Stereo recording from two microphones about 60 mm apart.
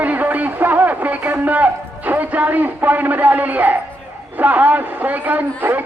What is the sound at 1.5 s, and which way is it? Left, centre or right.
A woman's voice, right.